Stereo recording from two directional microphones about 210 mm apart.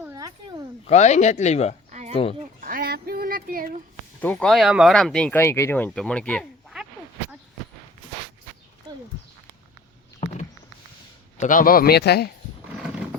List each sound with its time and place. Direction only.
0.0 s a sound: 15° right (ahead or behind)
0.9 s speech: 35° left (ahead or behind)
1.9 s a sound: 35° right (ahead or behind)
4.2 s speech: 5° left (ahead or behind)
8.9 s horse: 20° right (ahead or behind)
10.2 s vehicle: 30° left (ahead or behind)
11.3 s speech: 40° left (ahead or behind)